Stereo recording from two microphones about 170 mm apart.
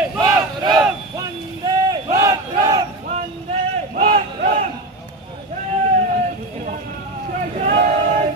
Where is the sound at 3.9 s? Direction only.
35° right (ahead or behind).